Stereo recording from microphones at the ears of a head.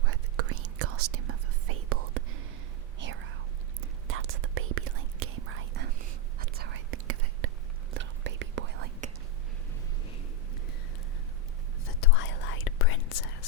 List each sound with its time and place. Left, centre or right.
0.0 s whispering: right
11.9 s whispering: left